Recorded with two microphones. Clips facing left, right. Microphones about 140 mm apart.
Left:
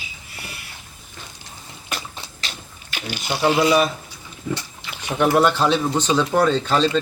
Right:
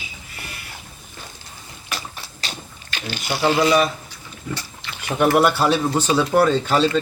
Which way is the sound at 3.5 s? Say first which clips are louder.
Even; 20° left (ahead or behind).